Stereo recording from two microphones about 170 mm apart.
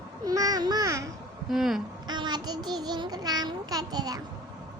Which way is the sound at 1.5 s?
Centre (ahead or behind).